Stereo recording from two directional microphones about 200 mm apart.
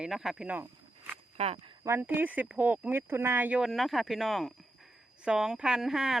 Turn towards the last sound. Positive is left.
turn(degrees=0)  # may be behind; listen again after turning